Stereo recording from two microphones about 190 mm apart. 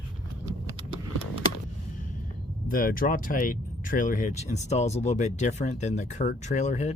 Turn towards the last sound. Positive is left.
turn(degrees=35)  # may be behind; listen again after turning